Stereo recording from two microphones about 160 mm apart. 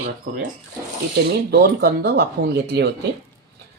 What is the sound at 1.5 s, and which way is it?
Speech, 75° right (ahead or behind).